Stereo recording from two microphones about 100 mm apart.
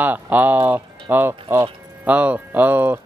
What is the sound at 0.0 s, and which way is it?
Speech, 15° right (ahead or behind).